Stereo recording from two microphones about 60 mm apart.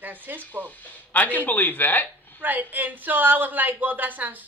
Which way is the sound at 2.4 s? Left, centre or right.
Right.